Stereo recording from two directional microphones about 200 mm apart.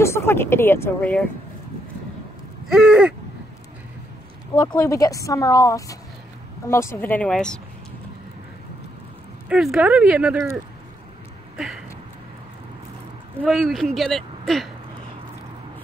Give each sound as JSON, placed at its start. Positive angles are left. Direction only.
{"t": 0.0, "sound": "speech", "side_deg": 15}
{"t": 2.6, "sound": "a woman's voice", "side_deg": -5}
{"t": 4.6, "sound": "speech", "side_deg": 15}
{"t": 9.5, "sound": "a woman's voice", "side_deg": -5}
{"t": 11.5, "sound": "a sound", "side_deg": -5}
{"t": 13.4, "sound": "a woman's voice", "side_deg": 0}